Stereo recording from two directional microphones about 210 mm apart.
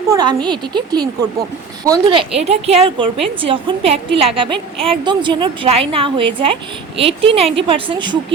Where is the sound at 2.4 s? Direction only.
30° right (ahead or behind).